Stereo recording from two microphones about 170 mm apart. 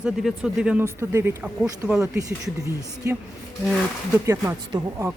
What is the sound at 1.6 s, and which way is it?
Speech, 5° right (ahead or behind).